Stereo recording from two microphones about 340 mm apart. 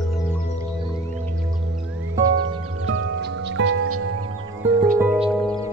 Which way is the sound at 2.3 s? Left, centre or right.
Right.